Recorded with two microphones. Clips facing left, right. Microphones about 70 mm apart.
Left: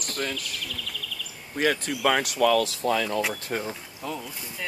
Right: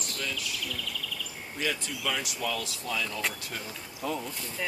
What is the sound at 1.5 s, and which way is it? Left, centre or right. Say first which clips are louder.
Speech: left 8 dB; left.